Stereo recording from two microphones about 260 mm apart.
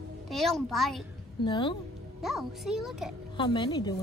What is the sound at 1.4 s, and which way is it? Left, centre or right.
Speech, centre.